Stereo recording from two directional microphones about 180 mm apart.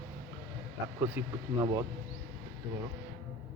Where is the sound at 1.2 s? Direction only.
15° right (ahead or behind).